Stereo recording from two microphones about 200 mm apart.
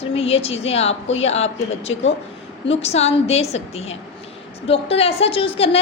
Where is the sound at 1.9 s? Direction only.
70° left (ahead or behind).